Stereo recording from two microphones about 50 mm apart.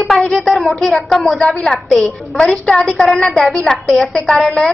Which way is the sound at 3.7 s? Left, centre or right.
Centre.